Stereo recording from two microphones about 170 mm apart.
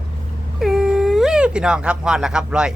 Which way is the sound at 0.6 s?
5° right (ahead or behind).